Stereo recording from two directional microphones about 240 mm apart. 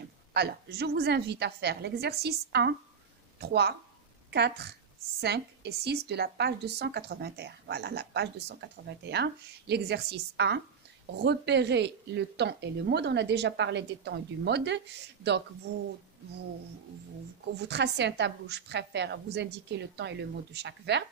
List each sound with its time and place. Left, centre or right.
0.3 s a woman's voice: right
17.6 s a woman's voice: right